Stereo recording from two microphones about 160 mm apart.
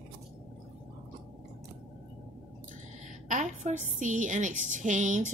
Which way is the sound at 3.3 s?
50° right (ahead or behind).